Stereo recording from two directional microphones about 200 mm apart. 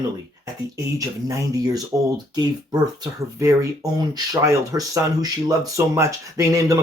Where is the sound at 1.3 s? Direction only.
20° right (ahead or behind).